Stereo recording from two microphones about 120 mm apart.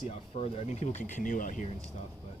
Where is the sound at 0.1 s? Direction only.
55° left (ahead or behind); by 1.6 s 90° left.